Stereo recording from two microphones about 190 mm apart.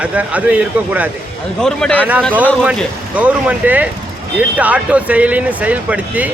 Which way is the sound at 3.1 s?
5° right (ahead or behind).